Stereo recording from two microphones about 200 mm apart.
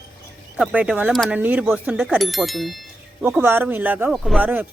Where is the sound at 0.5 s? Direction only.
5° right (ahead or behind).